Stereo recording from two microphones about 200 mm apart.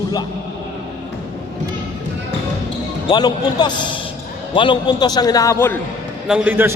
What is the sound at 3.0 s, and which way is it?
A man's voice, 20° left (ahead or behind).